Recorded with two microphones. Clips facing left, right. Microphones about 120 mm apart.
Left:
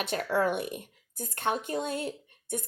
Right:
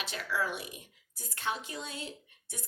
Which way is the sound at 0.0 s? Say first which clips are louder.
Left 7 dB; 50° left (ahead or behind).